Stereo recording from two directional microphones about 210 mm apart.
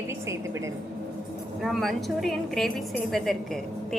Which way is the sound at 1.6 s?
Centre (ahead or behind).